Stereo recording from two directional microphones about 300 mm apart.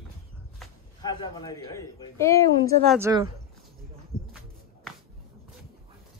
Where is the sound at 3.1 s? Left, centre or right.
Centre.